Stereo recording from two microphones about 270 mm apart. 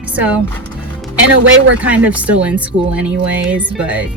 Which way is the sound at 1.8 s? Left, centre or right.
Centre.